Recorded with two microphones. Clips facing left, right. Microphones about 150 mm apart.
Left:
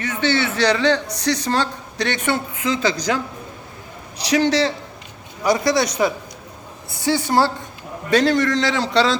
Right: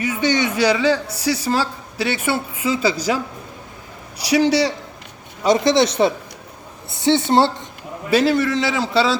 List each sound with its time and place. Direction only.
0.0 s a man's voice: 10° right (ahead or behind)
4.3 s a man's voice: 10° right (ahead or behind)
5.4 s speech: 20° right (ahead or behind)
8.1 s a man's voice: 5° right (ahead or behind)